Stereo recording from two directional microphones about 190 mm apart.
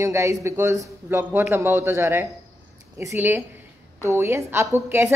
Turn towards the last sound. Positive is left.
turn(degrees=-15)  # may be behind; listen again after turning